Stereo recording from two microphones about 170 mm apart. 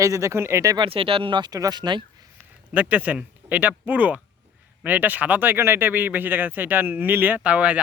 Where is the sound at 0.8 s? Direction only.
30° right (ahead or behind).